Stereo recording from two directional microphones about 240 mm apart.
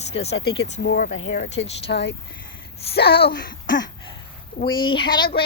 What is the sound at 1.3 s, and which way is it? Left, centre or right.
Speech, left.